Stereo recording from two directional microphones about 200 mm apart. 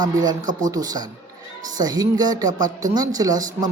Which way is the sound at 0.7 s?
20° right (ahead or behind).